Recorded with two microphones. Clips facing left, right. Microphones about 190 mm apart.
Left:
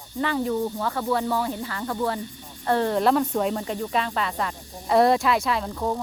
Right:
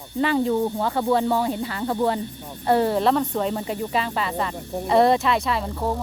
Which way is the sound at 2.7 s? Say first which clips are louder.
Right 2 dB; 10° right (ahead or behind).